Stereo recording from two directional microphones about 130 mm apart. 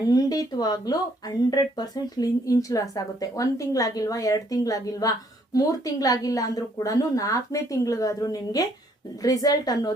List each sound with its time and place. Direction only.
0.1 s speech: 30° left (ahead or behind)